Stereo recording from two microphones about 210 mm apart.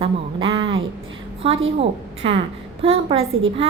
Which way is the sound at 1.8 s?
25° right (ahead or behind).